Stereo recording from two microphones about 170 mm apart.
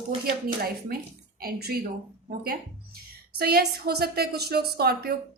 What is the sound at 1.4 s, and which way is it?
Speech, 65° right (ahead or behind).